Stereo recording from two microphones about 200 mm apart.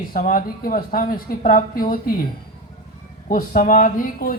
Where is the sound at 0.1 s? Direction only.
45° left (ahead or behind).